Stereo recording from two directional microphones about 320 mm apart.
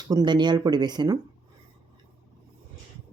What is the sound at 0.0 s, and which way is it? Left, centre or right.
Speech, centre.